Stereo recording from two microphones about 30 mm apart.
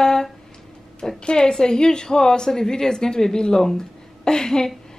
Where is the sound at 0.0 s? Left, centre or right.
Left.